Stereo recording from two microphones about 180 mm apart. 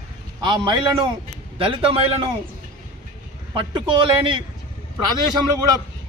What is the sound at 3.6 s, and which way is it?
Speech, 30° right (ahead or behind).